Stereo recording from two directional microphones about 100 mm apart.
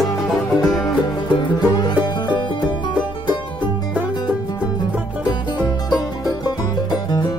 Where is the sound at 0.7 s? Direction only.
40° left (ahead or behind).